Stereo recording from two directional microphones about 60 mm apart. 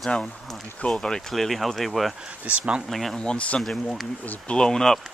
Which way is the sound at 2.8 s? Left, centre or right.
Centre.